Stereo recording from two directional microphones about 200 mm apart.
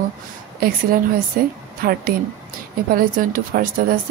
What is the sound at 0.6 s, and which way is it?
Speech, 45° right (ahead or behind).